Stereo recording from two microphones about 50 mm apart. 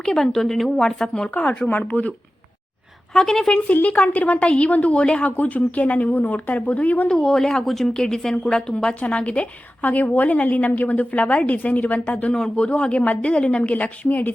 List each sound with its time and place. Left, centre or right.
0.0 s a woman's voice: centre
1.6 s speech: left
3.2 s a woman's voice: centre
3.5 s a woman's voice: left
5.4 s speech: left
7.1 s a woman's voice: centre
9.0 s a woman's voice: left